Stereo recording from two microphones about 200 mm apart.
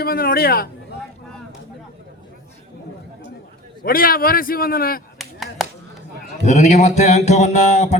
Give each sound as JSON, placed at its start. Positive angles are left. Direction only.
{"t": 0.0, "sound": "a man's voice", "side_deg": 50}
{"t": 3.8, "sound": "a man's voice", "side_deg": 45}
{"t": 5.1, "sound": "finger snapping", "side_deg": 0}
{"t": 6.4, "sound": "speech", "side_deg": 35}